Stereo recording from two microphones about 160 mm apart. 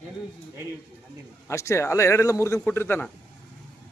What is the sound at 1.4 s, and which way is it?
A man's voice, 15° left (ahead or behind).